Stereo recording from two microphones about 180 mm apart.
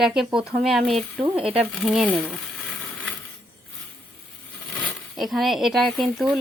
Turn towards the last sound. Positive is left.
turn(degrees=0)  # may be behind; listen again after turning